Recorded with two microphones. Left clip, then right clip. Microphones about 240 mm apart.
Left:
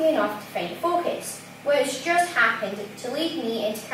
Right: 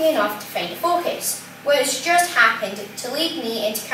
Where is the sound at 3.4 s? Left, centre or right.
Left.